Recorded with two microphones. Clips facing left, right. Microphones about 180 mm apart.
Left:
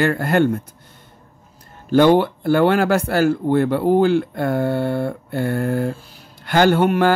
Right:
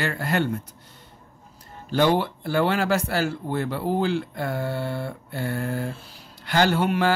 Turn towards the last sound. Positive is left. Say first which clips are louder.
# left 6 dB
turn(degrees=55)  # may be behind; listen again after turning